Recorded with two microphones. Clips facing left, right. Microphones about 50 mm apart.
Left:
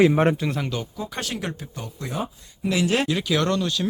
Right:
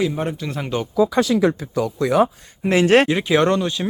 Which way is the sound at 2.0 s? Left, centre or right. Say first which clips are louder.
Right 13 dB; right.